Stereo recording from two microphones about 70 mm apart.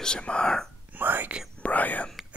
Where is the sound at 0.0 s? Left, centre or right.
Centre.